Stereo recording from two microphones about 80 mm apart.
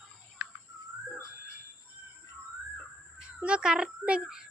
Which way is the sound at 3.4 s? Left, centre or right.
Centre.